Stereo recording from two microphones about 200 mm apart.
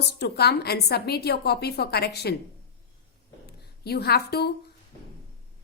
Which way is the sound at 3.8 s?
55° left (ahead or behind).